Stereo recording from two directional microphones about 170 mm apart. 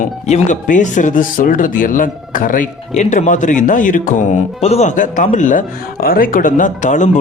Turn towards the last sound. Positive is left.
turn(degrees=45)  # may be behind; listen again after turning